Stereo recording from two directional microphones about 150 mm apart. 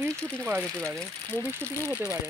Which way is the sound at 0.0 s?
15° right (ahead or behind).